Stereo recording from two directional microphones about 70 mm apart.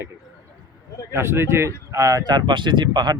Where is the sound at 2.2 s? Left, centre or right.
Right.